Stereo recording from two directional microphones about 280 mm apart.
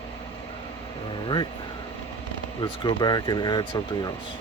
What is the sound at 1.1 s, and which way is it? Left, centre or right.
Speech, centre.